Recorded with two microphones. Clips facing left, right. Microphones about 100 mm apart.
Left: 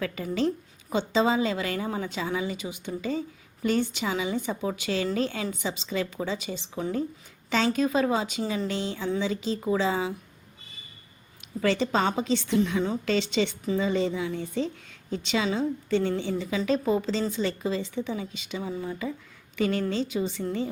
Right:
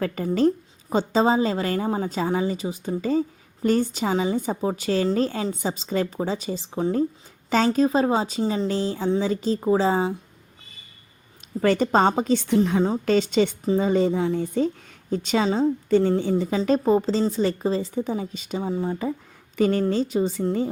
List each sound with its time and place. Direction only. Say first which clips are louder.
0.3 s a woman's voice: right 6 dB; 40° right (ahead or behind)
11.6 s a woman's voice: right 6 dB; 45° right (ahead or behind)